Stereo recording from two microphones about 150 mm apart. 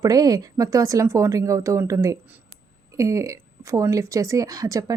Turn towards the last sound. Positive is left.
turn(degrees=-20)  # may be behind; listen again after turning